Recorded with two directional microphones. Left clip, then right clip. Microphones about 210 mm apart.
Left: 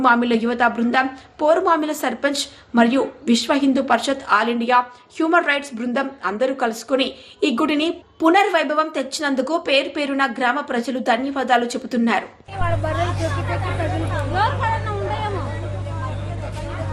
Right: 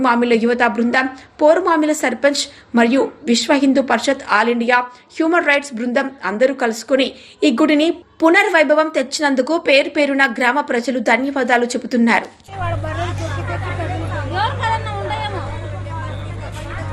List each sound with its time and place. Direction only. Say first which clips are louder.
0.0 s a woman's voice: right 2 dB; 5° right (ahead or behind)
14.3 s chatter: right 1 dB; 60° right (ahead or behind)